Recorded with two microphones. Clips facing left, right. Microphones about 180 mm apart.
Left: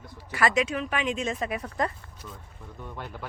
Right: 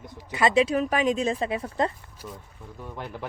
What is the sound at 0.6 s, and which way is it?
Speech, 35° right (ahead or behind).